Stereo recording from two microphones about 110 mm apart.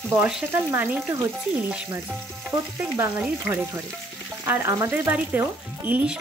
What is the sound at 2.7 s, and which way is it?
Frying, 25° right (ahead or behind).